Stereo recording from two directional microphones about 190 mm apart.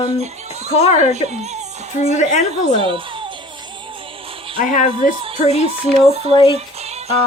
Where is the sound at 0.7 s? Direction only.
35° left (ahead or behind).